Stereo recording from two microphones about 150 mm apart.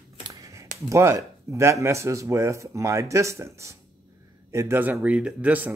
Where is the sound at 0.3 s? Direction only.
20° right (ahead or behind).